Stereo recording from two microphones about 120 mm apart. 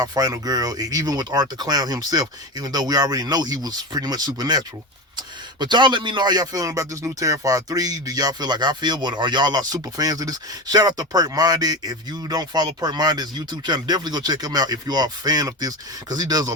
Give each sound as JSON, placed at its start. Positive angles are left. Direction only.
{"t": 0.0, "sound": "a man's voice", "side_deg": -35}